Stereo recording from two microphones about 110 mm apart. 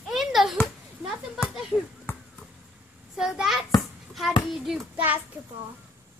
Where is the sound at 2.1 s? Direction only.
20° left (ahead or behind).